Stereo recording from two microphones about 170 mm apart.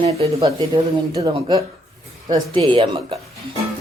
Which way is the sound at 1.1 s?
20° right (ahead or behind).